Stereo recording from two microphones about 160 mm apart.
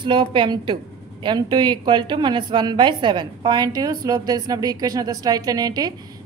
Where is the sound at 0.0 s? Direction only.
30° right (ahead or behind).